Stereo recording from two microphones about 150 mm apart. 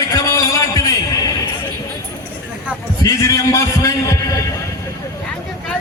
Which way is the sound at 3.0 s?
20° left (ahead or behind).